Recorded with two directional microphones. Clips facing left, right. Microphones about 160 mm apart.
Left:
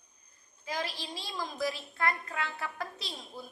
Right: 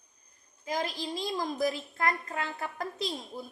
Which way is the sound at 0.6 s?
45° right (ahead or behind).